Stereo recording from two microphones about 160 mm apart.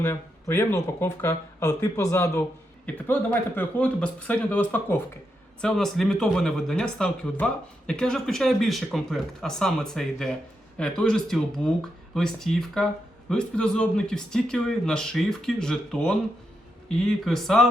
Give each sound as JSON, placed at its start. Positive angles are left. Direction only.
{"t": 0.0, "sound": "speech", "side_deg": 15}